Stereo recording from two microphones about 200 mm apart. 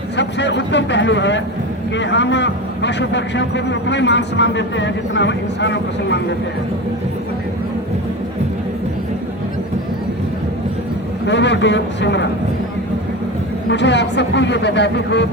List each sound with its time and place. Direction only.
0.2 s a man's voice: 60° left (ahead or behind)
11.3 s a man's voice: 60° left (ahead or behind)
13.7 s a man's voice: 60° left (ahead or behind)